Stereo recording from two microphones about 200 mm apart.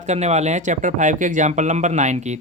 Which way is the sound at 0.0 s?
35° right (ahead or behind).